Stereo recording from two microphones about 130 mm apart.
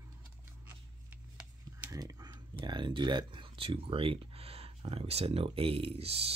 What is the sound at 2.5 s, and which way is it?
Speech, 35° right (ahead or behind).